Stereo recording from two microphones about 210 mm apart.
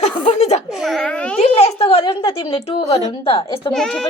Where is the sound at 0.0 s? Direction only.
30° left (ahead or behind).